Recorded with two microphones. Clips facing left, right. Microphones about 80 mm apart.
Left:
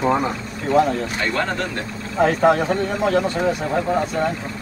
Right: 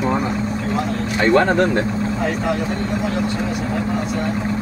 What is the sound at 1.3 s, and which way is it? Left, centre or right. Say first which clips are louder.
Speech: right 8 dB; right.